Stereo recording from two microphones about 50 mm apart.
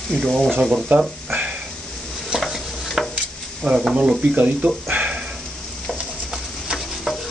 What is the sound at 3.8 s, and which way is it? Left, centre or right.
Speech, centre.